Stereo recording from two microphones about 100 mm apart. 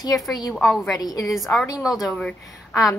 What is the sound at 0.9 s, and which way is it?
Speech, 40° left (ahead or behind).